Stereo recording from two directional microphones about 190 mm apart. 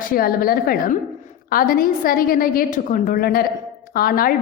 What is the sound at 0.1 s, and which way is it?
A woman's voice, 50° left (ahead or behind).